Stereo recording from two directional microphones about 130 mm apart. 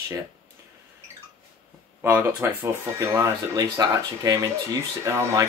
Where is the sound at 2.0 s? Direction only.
20° right (ahead or behind).